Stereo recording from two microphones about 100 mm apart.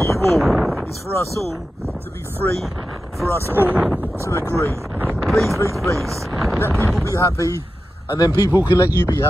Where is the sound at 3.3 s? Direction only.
25° right (ahead or behind).